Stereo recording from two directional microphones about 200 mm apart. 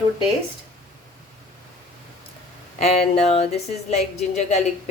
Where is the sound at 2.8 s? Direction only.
30° left (ahead or behind).